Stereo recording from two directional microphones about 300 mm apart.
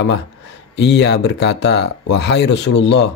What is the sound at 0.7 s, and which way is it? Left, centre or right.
Speech, left.